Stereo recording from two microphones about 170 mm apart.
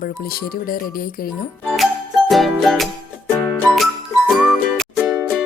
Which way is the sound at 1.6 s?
5° left (ahead or behind).